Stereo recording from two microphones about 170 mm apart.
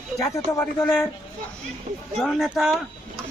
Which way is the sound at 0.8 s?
5° left (ahead or behind).